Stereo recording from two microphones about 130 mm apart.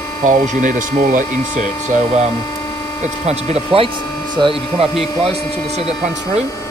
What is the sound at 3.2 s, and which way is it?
Speech, 55° right (ahead or behind).